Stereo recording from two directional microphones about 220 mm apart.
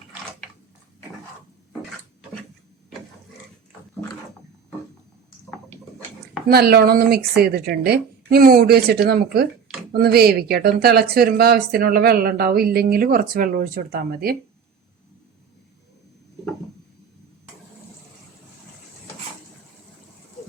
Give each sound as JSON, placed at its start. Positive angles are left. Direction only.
{"t": 6.5, "sound": "speech", "side_deg": -45}